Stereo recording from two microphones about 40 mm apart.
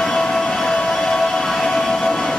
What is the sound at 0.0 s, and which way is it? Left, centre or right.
Music, centre.